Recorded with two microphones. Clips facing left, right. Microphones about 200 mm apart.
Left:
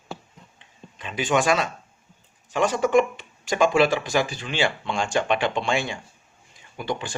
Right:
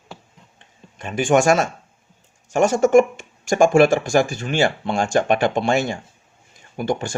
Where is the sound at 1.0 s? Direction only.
50° right (ahead or behind).